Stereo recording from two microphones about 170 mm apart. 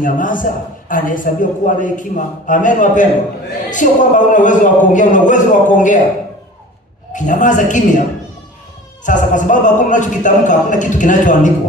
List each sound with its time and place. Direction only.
0.0 s a man's voice: 50° left (ahead or behind)
7.1 s a man's voice: 50° left (ahead or behind)
9.0 s a man's voice: 50° left (ahead or behind)